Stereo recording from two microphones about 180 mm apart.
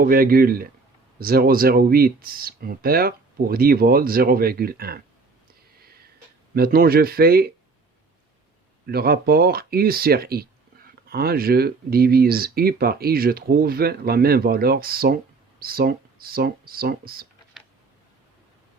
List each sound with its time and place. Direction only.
0.0 s speech: 55° right (ahead or behind)
6.5 s speech: 55° right (ahead or behind)
8.9 s speech: 60° right (ahead or behind)